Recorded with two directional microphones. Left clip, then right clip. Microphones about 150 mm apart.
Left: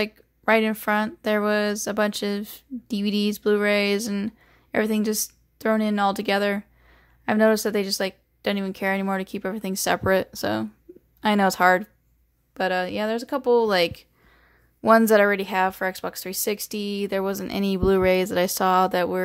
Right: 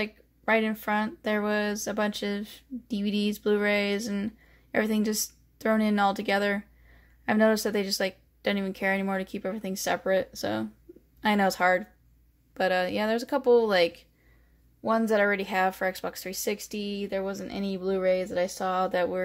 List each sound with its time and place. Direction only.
0.0 s speech: 30° left (ahead or behind)
12.5 s speech: 20° left (ahead or behind)
14.8 s speech: 50° left (ahead or behind)
15.1 s a woman's voice: 25° left (ahead or behind)